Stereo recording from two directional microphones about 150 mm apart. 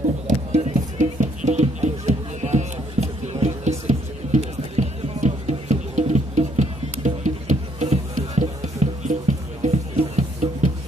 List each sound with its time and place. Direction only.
0.3 s music: 45° right (ahead or behind)